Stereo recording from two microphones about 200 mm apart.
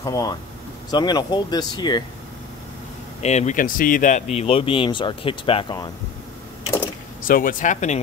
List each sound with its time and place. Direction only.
0.0 s speech: 20° left (ahead or behind)
3.2 s speech: 35° left (ahead or behind)
4.4 s speech: 25° left (ahead or behind)
7.2 s speech: 45° left (ahead or behind)